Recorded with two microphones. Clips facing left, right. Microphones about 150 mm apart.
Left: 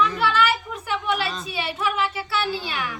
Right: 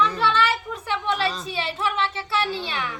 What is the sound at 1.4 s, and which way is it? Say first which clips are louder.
Speech: even; 25° right (ahead or behind).